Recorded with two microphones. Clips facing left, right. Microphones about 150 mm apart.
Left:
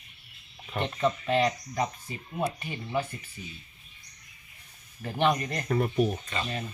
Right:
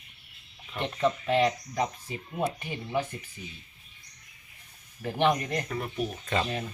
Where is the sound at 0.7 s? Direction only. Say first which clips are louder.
Left 2 dB; 45° left (ahead or behind).